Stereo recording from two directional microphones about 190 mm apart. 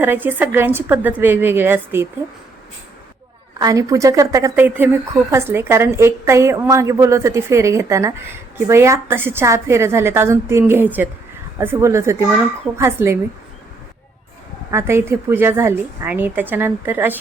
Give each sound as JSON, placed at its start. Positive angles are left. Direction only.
{"t": 0.0, "sound": "a woman's voice", "side_deg": -10}
{"t": 3.6, "sound": "a woman's voice", "side_deg": -15}
{"t": 14.7, "sound": "a woman's voice", "side_deg": -15}